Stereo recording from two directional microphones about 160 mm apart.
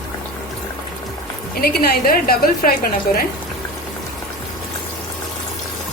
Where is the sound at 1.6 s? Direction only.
80° left.